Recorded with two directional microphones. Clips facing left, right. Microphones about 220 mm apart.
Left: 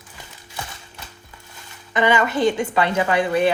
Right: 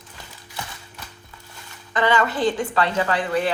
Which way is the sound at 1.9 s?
15° left (ahead or behind).